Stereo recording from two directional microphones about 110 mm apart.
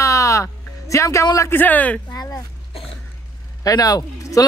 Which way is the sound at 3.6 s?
35° left (ahead or behind).